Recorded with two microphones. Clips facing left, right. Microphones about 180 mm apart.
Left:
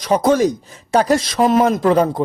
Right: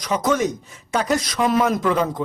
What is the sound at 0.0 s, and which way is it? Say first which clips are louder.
Speech: left 6 dB; 30° left (ahead or behind).